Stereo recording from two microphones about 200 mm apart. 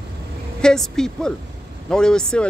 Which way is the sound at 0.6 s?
5° left (ahead or behind).